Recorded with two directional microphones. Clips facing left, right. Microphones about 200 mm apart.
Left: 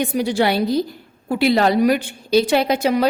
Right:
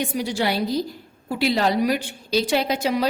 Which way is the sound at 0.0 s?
60° left (ahead or behind).